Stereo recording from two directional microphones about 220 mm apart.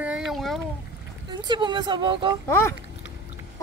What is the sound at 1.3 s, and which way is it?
Speech, 20° right (ahead or behind).